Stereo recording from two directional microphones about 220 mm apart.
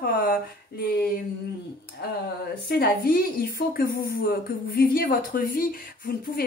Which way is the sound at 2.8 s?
40° left (ahead or behind).